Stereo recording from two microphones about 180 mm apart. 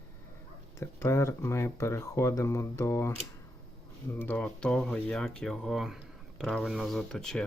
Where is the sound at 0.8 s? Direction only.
15° left (ahead or behind).